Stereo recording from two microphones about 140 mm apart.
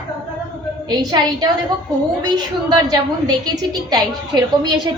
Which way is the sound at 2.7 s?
30° right (ahead or behind).